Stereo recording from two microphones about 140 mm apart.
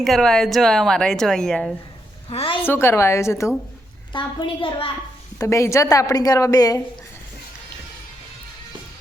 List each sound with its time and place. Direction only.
0.0 s speech: 5° left (ahead or behind)
2.3 s a woman's voice: 45° left (ahead or behind)
2.6 s a woman's voice: 15° left (ahead or behind)
4.1 s a woman's voice: 35° left (ahead or behind)
5.4 s a woman's voice: 20° left (ahead or behind)